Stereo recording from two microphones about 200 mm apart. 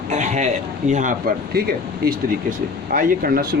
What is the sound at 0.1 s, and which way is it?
A man's voice, 35° right (ahead or behind).